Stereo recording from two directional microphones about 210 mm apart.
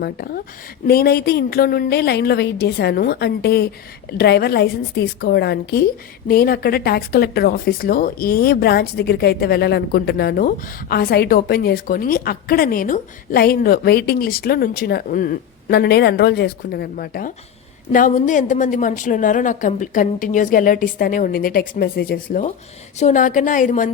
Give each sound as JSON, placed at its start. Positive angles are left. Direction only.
{"t": 0.0, "sound": "a woman's voice", "side_deg": 45}